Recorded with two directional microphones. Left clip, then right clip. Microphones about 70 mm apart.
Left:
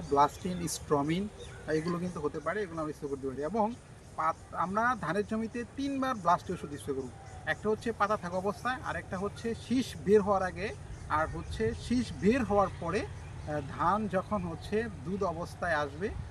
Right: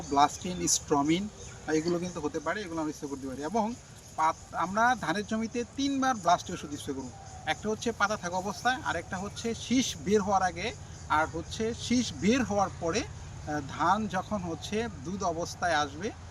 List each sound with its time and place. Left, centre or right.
0.1 s speech: left
3.4 s speech: centre